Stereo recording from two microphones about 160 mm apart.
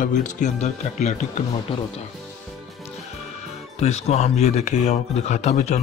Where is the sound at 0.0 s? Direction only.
50° left (ahead or behind).